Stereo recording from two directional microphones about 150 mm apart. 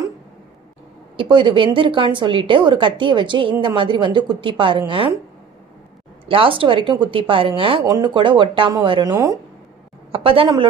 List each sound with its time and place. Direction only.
1.1 s a woman's voice: 30° right (ahead or behind)
6.2 s a woman's voice: 35° right (ahead or behind); by 9.4 s 20° right (ahead or behind)
10.1 s a woman's voice: 35° right (ahead or behind)